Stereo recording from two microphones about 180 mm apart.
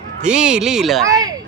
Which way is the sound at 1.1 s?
20° right (ahead or behind).